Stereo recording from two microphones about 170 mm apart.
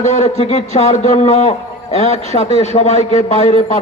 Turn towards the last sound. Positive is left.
turn(degrees=40)  # may be behind; listen again after turning